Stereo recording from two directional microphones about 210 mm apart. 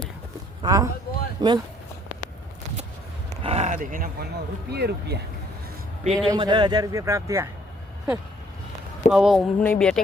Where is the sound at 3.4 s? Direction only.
30° right (ahead or behind).